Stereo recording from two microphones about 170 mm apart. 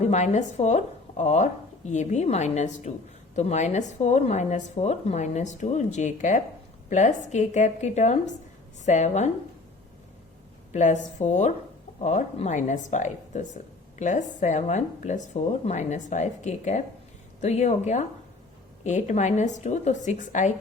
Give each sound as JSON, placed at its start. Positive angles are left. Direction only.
{"t": 0.0, "sound": "a woman's voice", "side_deg": 40}
{"t": 10.7, "sound": "a woman's voice", "side_deg": 45}